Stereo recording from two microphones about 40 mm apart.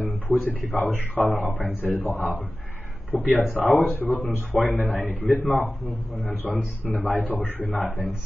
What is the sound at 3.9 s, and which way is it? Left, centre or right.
Speech, left.